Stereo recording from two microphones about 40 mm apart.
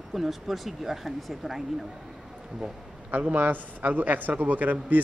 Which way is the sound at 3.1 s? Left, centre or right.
Right.